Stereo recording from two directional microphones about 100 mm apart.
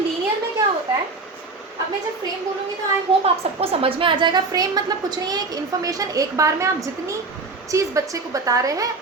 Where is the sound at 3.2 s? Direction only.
75° right (ahead or behind); by 6.7 s 35° right (ahead or behind).